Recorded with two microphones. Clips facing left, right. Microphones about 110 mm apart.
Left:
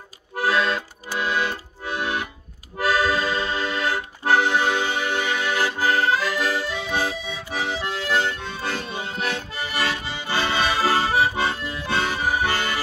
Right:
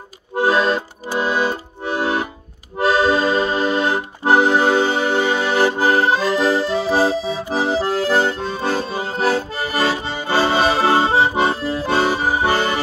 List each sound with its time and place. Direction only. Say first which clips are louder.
0.4 s accordion: right 5 dB; 30° right (ahead or behind)